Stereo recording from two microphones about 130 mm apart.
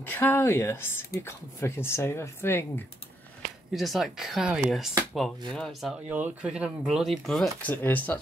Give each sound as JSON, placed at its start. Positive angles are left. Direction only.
{"t": 0.0, "sound": "speech", "side_deg": 15}
{"t": 3.7, "sound": "speech", "side_deg": 0}
{"t": 7.7, "sound": "speech", "side_deg": 15}